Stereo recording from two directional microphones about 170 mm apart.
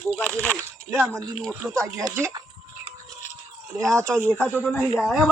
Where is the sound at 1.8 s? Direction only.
20° right (ahead or behind).